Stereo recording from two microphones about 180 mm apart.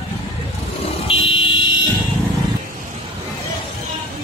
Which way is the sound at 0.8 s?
30° left (ahead or behind).